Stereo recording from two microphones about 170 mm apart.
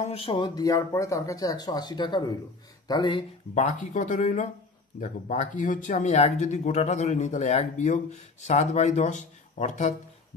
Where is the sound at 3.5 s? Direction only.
45° left (ahead or behind).